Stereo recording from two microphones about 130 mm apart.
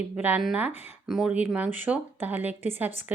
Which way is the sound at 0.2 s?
10° right (ahead or behind).